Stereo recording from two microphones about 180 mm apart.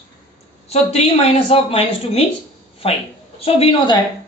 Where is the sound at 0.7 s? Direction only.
35° left (ahead or behind).